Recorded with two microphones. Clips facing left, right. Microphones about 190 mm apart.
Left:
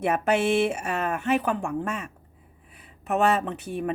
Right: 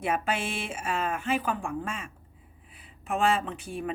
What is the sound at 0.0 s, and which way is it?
Speech, 65° left (ahead or behind).